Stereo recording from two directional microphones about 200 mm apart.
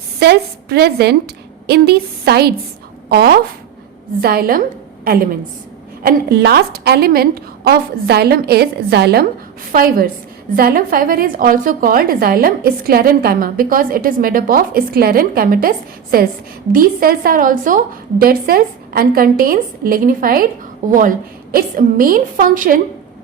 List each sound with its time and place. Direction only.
0.2 s a woman's voice: 55° right (ahead or behind)
16.7 s a woman's voice: 45° right (ahead or behind)
21.5 s a woman's voice: 45° right (ahead or behind)